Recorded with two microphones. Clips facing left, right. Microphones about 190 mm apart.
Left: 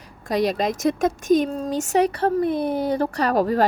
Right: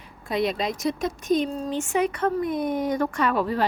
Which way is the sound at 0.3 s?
40° left (ahead or behind).